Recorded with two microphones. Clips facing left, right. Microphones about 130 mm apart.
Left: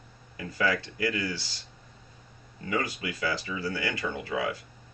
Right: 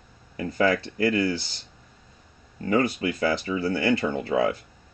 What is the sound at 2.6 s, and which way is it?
Speech, 35° right (ahead or behind).